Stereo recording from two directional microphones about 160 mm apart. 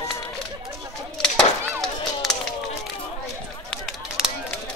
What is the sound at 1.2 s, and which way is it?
Chop, centre (ahead or behind).